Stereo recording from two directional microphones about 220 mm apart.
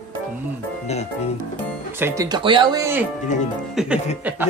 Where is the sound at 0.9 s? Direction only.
30° left (ahead or behind).